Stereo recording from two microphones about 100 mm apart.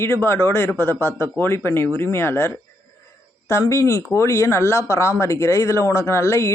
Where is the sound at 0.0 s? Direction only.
25° left (ahead or behind).